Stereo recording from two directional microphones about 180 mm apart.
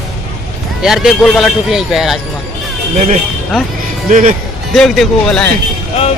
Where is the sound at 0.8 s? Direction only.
Centre (ahead or behind).